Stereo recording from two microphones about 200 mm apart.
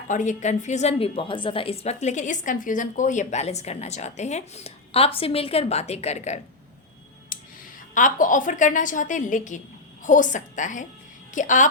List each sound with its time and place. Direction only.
0.1 s a woman's voice: 40° left (ahead or behind)
7.3 s clicking: 45° left (ahead or behind)
7.9 s a woman's voice: 40° left (ahead or behind)